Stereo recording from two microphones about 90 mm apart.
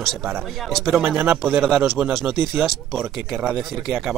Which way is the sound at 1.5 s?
20° right (ahead or behind).